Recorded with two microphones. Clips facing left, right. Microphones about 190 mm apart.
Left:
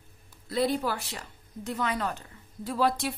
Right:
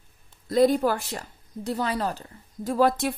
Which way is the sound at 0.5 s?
45° right (ahead or behind).